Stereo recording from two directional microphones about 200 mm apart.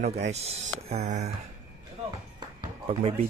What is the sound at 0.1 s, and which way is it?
Speech, 35° right (ahead or behind).